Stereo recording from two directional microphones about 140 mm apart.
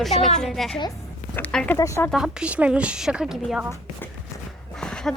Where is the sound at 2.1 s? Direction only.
5° right (ahead or behind).